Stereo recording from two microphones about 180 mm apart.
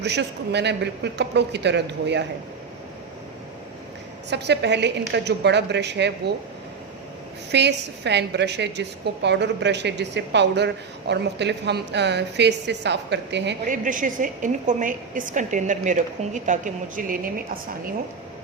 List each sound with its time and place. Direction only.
0.0 s a woman's voice: 70° right (ahead or behind)
4.3 s a woman's voice: 70° right (ahead or behind)
7.5 s a woman's voice: 70° right (ahead or behind)
13.7 s a woman's voice: 45° right (ahead or behind)